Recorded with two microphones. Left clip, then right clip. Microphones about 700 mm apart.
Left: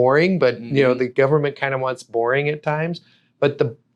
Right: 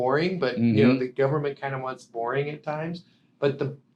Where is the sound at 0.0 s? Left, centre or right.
Left.